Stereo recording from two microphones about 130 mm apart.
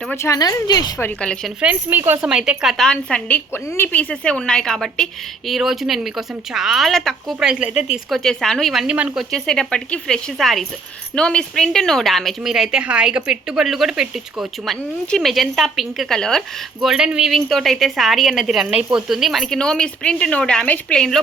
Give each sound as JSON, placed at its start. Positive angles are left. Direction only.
{"t": 0.2, "sound": "a woman's voice", "side_deg": 25}
{"t": 0.9, "sound": "speech", "side_deg": 15}
{"t": 1.6, "sound": "a woman's voice", "side_deg": -15}
{"t": 7.3, "sound": "a woman's voice", "side_deg": -10}
{"t": 8.1, "sound": "speech", "side_deg": 5}
{"t": 9.3, "sound": "speech", "side_deg": 5}